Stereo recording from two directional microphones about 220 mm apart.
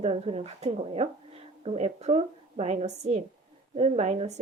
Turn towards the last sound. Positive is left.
turn(degrees=-30)  # may be behind; listen again after turning